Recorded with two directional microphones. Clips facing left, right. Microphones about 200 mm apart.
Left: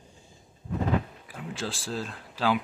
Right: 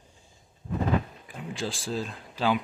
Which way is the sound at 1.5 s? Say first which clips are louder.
Right 2 dB; centre (ahead or behind).